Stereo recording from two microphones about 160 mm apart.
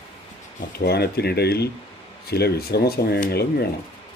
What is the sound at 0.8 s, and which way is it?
Speech, 80° left.